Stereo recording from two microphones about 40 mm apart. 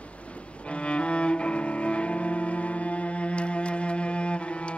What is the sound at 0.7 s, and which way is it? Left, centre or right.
Cello, left.